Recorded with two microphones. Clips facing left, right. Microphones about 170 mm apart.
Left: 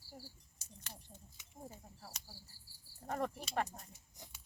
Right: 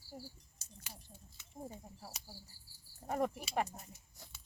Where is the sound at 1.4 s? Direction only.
15° left (ahead or behind).